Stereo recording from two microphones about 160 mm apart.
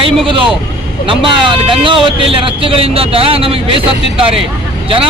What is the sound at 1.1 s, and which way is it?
Speech, 30° right (ahead or behind).